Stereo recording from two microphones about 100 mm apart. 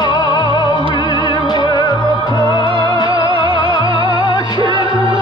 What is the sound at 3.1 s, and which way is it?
Music, 55° right (ahead or behind).